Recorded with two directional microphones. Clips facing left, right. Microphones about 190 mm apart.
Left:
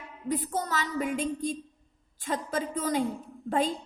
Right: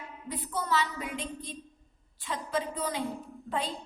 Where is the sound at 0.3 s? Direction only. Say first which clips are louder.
Left 3 dB; 45° left (ahead or behind).